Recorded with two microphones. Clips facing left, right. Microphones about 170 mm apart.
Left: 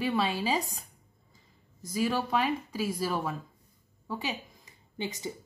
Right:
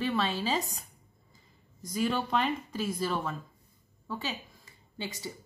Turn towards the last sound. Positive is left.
turn(degrees=20)  # may be behind; listen again after turning